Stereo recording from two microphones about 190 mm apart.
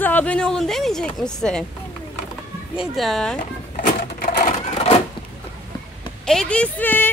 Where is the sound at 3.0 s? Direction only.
Centre (ahead or behind).